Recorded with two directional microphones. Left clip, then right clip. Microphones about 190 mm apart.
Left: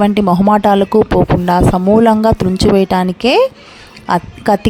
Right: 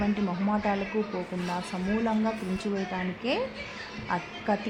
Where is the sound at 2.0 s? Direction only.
55° left (ahead or behind).